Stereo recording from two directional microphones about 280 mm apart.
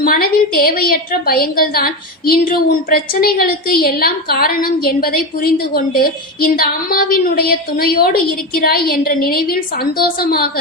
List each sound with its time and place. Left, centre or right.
0.0 s a woman's voice: left